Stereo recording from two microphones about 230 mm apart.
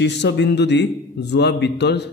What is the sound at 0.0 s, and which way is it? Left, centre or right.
Speech, left.